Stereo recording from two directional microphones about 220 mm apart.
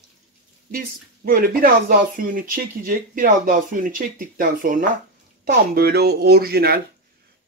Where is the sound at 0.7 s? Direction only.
40° right (ahead or behind).